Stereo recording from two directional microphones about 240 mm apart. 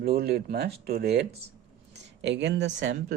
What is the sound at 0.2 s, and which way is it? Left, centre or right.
Speech, right.